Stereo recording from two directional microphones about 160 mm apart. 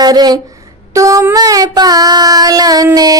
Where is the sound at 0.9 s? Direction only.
20° right (ahead or behind).